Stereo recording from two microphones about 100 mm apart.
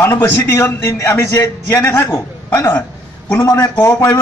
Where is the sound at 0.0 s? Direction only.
25° left (ahead or behind).